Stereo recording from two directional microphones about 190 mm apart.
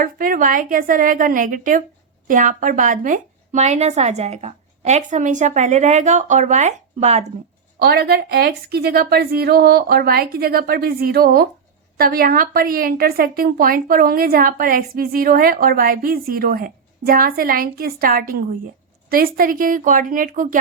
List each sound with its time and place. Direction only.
0.0 s a woman's voice: 45° right (ahead or behind)
7.8 s a woman's voice: 55° right (ahead or behind)